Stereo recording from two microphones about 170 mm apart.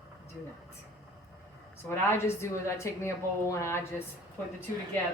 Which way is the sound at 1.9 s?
15° left (ahead or behind).